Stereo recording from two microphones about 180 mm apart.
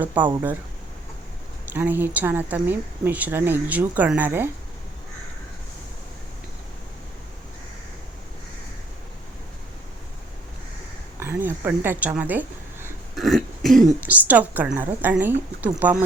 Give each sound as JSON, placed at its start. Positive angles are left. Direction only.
{"t": 0.0, "sound": "speech", "side_deg": -10}
{"t": 1.7, "sound": "speech", "side_deg": -10}
{"t": 11.2, "sound": "speech", "side_deg": -10}
{"t": 13.1, "sound": "speech", "side_deg": 0}